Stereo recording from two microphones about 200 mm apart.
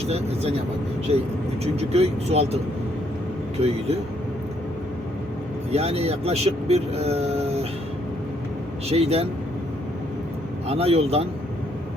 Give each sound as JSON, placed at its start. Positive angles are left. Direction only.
{"t": 1.1, "sound": "speech", "side_deg": -30}
{"t": 3.6, "sound": "speech", "side_deg": -30}
{"t": 5.7, "sound": "speech", "side_deg": -30}
{"t": 8.9, "sound": "speech", "side_deg": -30}
{"t": 10.7, "sound": "speech", "side_deg": -30}